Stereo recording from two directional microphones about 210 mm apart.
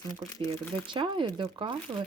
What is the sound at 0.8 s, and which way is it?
Speech, 25° right (ahead or behind).